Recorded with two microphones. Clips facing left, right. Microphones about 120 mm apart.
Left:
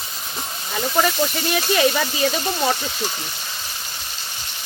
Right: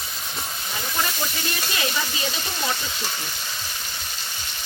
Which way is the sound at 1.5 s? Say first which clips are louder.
Left 12 dB; 65° left (ahead or behind).